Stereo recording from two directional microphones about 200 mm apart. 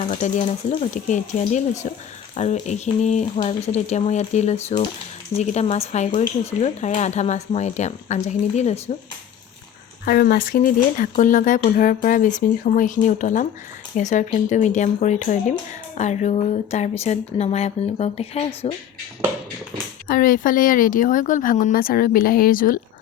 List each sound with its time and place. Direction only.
0.1 s speech: 35° left (ahead or behind)
10.1 s speech: 50° left (ahead or behind); by 18.7 s 30° left (ahead or behind)
20.1 s speech: 45° left (ahead or behind)